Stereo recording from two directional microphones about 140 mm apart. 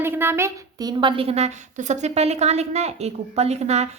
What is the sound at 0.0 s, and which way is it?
A woman's voice, 15° right (ahead or behind).